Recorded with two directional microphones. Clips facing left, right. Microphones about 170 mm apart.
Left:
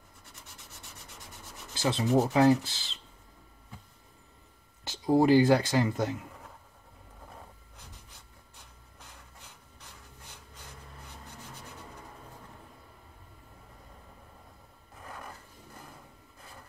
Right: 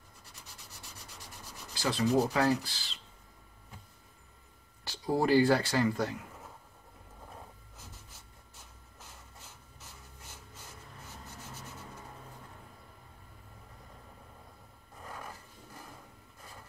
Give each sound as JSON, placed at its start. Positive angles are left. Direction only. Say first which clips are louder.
{"t": 0.2, "sound": "rub", "louder": "left 1 dB", "side_deg": 0}
{"t": 1.7, "sound": "rub", "louder": "left 2 dB", "side_deg": 20}
{"t": 2.0, "sound": "speech", "louder": "left 1 dB", "side_deg": 0}
{"t": 2.3, "sound": "speech", "louder": "left 6 dB", "side_deg": 20}
{"t": 4.8, "sound": "speech", "louder": "left 6 dB", "side_deg": 20}
{"t": 15.0, "sound": "a sound", "louder": "even", "side_deg": 0}